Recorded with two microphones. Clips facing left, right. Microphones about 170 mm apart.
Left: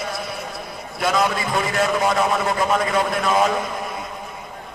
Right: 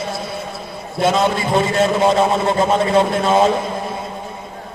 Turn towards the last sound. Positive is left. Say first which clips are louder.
# right 4 dB
turn(degrees=-30)  # may be behind; listen again after turning